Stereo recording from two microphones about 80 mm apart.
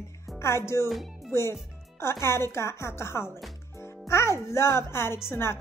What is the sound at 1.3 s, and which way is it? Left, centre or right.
Speech, left.